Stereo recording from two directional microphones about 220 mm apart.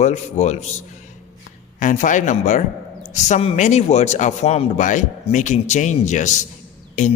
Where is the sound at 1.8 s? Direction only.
35° left (ahead or behind).